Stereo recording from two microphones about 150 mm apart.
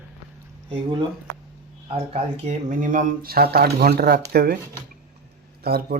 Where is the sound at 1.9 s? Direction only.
45° right (ahead or behind); by 4.5 s 90° right.